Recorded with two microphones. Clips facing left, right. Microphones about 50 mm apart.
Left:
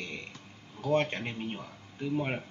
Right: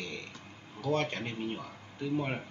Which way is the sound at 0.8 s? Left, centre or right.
Left.